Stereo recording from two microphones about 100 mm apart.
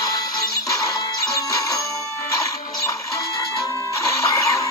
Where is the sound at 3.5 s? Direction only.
35° left (ahead or behind).